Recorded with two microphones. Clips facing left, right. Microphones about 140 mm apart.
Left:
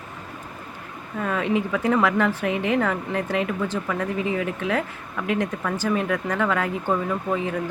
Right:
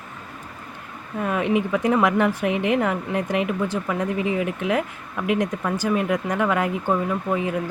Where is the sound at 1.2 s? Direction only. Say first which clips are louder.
Right 2 dB; 15° right (ahead or behind).